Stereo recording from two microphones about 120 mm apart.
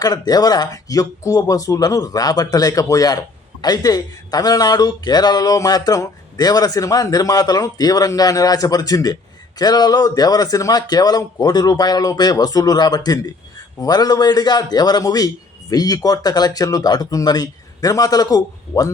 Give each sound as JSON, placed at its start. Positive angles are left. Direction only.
{"t": 0.0, "sound": "speech", "side_deg": 30}